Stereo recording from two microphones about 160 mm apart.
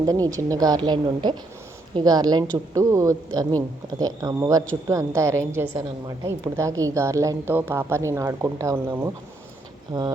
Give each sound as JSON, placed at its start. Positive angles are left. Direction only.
{"t": 0.0, "sound": "a woman's voice", "side_deg": -25}